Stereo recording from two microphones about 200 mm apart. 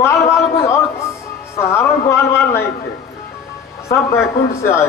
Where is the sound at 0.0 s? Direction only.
15° left (ahead or behind).